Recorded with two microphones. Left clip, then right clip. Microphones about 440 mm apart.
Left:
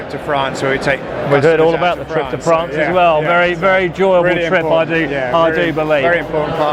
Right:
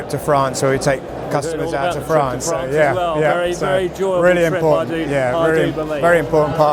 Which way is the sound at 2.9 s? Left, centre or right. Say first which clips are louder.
Left 5 dB; left.